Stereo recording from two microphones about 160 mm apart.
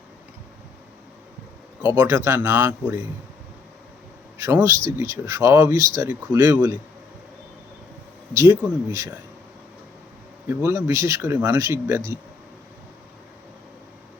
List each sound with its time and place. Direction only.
2.0 s speech: 15° right (ahead or behind)
4.4 s a man's voice: 15° right (ahead or behind)
8.3 s speech: 15° right (ahead or behind)
10.5 s speech: 15° right (ahead or behind)